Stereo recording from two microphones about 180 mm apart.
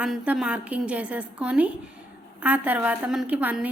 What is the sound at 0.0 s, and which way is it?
A woman's voice, 5° right (ahead or behind).